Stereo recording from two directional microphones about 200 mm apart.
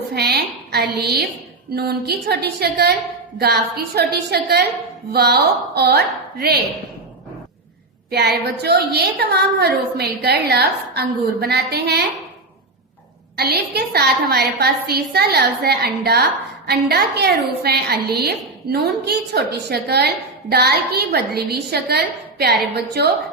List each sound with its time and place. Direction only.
0.1 s a woman's voice: 55° right (ahead or behind)
8.1 s a woman's voice: 55° right (ahead or behind)
13.3 s a woman's voice: 50° right (ahead or behind)